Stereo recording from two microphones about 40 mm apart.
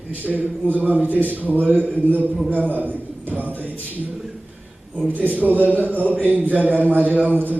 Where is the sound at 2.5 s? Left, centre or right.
Right.